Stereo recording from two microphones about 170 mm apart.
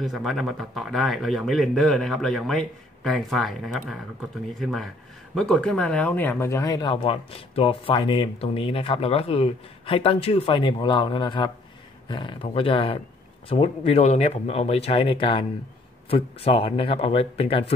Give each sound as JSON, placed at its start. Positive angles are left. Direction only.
{"t": 0.0, "sound": "speech", "side_deg": 0}
{"t": 6.9, "sound": "speech", "side_deg": 35}